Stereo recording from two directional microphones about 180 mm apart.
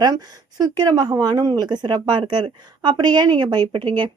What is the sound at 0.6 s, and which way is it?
Speech, 25° right (ahead or behind).